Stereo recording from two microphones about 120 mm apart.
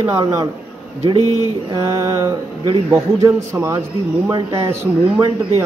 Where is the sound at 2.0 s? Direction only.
25° right (ahead or behind).